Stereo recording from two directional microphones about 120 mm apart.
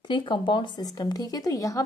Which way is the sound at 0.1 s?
40° left (ahead or behind).